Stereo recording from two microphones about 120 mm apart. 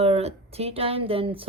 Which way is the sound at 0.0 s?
60° right (ahead or behind).